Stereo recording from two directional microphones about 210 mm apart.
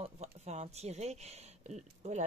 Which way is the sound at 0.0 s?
30° right (ahead or behind).